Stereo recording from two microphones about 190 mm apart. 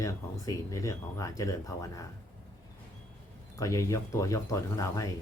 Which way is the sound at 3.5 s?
15° left (ahead or behind).